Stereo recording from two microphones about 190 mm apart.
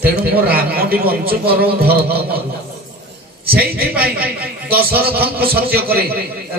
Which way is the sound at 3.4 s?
55° right (ahead or behind).